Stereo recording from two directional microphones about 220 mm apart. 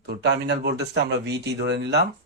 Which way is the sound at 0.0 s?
50° right (ahead or behind).